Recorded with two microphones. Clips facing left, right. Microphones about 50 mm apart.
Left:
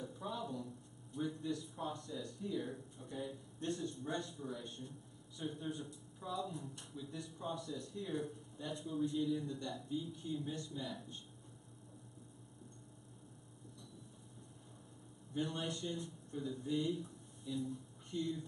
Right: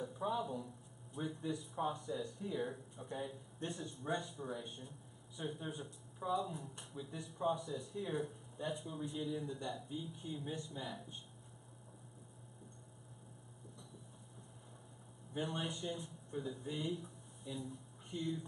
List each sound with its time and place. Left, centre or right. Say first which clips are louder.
0.1 s speech: right 4 dB; centre
15.3 s speech: left 1 dB; centre